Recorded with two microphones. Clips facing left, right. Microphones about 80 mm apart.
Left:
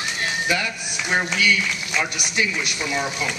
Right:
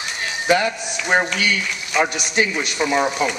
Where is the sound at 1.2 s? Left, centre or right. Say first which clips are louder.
Even; right.